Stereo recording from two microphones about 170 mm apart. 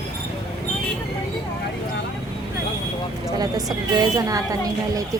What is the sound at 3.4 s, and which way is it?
A woman's voice, 20° right (ahead or behind).